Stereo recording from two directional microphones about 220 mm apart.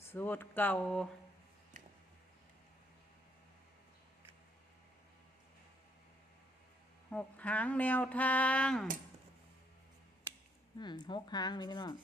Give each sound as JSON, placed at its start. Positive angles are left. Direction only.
{"t": 0.0, "sound": "speech", "side_deg": 10}
{"t": 1.7, "sound": "a sound", "side_deg": -35}
{"t": 7.1, "sound": "speech", "side_deg": 5}
{"t": 10.8, "sound": "speech", "side_deg": 20}